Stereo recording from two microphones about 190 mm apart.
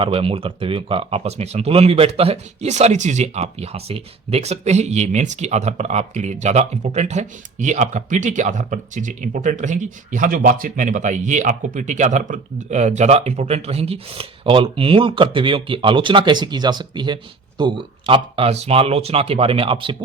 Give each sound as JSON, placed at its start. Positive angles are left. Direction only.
{"t": 0.0, "sound": "speech", "side_deg": -30}